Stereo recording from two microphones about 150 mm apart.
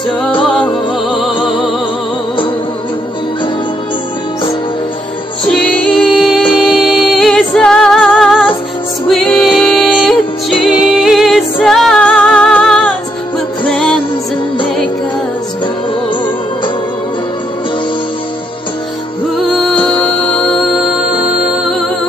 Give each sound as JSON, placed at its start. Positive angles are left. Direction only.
{"t": 0.3, "sound": "music", "side_deg": 35}
{"t": 5.4, "sound": "music", "side_deg": 5}
{"t": 19.5, "sound": "music", "side_deg": 5}